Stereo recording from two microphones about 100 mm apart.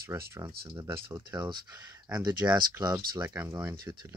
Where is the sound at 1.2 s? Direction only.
45° right (ahead or behind).